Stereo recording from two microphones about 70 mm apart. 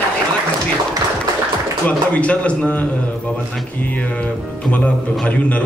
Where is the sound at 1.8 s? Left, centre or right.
Centre.